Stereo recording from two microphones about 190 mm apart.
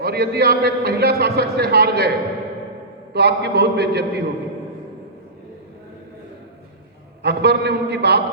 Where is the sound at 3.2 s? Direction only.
60° right (ahead or behind).